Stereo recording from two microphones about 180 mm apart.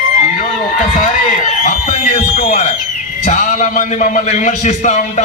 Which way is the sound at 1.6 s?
45° left (ahead or behind).